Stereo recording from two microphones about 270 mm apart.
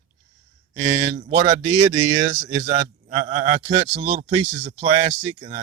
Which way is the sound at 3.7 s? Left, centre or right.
Right.